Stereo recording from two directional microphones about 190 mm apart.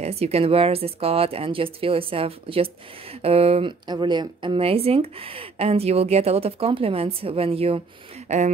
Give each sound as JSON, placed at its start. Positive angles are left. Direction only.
{"t": 0.0, "sound": "speech", "side_deg": -30}